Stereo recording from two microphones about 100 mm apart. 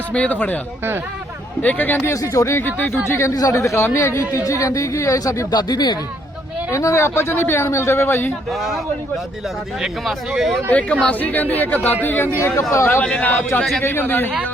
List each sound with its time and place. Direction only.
0.1 s speech: 15° left (ahead or behind)
1.6 s speech: 20° left (ahead or behind)
2.2 s speech: 30° left (ahead or behind)
5.5 s speech: 45° left (ahead or behind)
6.7 s speech: 30° left (ahead or behind)
9.8 s speech: 5° right (ahead or behind)
10.7 s speech: 10° left (ahead or behind)
13.0 s speech: 15° left (ahead or behind)